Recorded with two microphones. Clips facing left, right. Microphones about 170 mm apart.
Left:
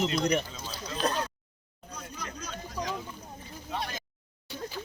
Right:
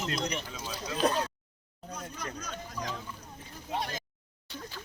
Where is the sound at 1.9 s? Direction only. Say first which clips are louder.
Right 1 dB; 55° right (ahead or behind).